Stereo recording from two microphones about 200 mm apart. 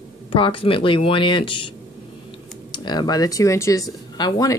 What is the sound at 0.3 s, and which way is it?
Speech, 25° left (ahead or behind).